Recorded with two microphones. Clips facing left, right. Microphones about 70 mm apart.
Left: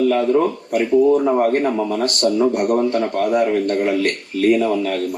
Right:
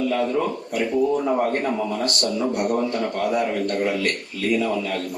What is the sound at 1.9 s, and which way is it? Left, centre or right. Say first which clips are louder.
Speech: left 6 dB; left.